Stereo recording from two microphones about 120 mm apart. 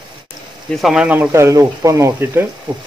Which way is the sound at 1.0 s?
15° right (ahead or behind).